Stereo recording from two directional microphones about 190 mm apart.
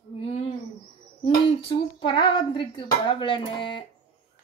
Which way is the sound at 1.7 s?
25° left (ahead or behind).